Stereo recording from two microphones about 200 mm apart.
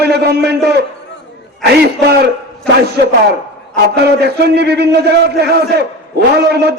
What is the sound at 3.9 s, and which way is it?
A man's voice, 55° right (ahead or behind).